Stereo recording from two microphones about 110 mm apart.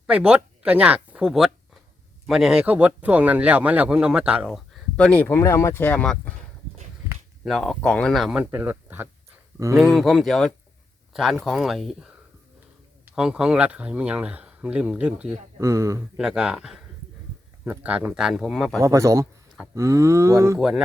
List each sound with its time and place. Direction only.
0.1 s speech: 10° right (ahead or behind)
4.9 s speech: 10° left (ahead or behind)
7.4 s speech: centre (ahead or behind)
8.5 s speech: 15° right (ahead or behind)
9.9 s speech: centre (ahead or behind)
13.1 s speech: 5° right (ahead or behind)
15.5 s speech: 30° right (ahead or behind)
16.1 s speech: 5° right (ahead or behind)
18.8 s speech: 30° right (ahead or behind)
20.6 s speech: 5° right (ahead or behind)